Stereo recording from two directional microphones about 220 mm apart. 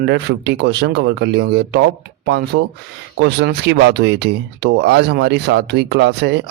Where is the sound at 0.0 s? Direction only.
50° right (ahead or behind).